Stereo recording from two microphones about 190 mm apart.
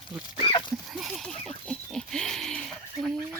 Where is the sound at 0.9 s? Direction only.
Centre (ahead or behind).